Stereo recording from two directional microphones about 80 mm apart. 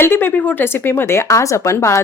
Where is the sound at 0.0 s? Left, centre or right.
Left.